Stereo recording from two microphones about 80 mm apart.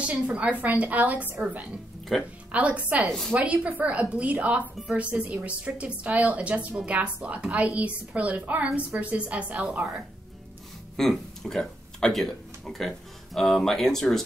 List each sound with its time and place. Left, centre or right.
0.0 s a woman's voice: centre
3.1 s a woman's voice: centre
3.3 s a woman's voice: centre
11.0 s speech: centre